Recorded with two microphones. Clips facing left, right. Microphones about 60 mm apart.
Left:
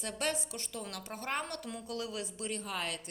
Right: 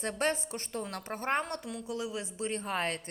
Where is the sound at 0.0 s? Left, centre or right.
Right.